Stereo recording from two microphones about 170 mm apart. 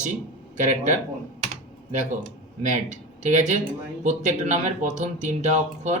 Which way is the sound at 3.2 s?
45° right (ahead or behind).